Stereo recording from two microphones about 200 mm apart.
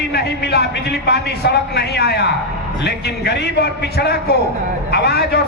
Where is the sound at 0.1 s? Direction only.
55° left (ahead or behind).